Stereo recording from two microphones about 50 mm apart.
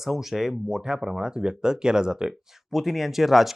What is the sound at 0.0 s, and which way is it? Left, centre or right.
Speech, centre.